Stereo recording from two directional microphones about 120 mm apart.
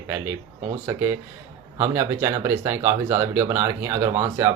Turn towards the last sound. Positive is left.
turn(degrees=-20)  # may be behind; listen again after turning